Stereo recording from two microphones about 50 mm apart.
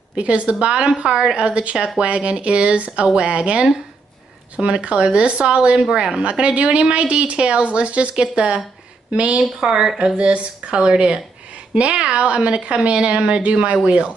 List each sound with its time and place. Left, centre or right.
0.1 s speech: right